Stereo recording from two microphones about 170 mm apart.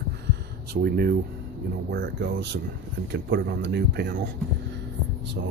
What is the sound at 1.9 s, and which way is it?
Speech, 80° right.